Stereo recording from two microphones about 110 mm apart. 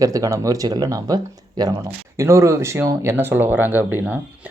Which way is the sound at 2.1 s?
25° right (ahead or behind).